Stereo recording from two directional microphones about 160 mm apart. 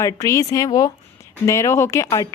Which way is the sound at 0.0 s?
20° left (ahead or behind).